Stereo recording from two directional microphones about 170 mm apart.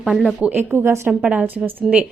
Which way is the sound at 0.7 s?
15° right (ahead or behind).